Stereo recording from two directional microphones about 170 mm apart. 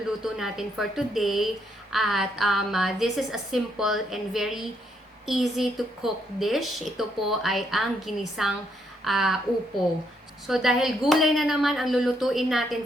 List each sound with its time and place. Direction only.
0.2 s a woman's voice: centre (ahead or behind)
10.4 s a woman's voice: centre (ahead or behind)